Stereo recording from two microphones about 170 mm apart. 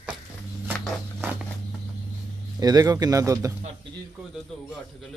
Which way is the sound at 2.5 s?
20° right (ahead or behind).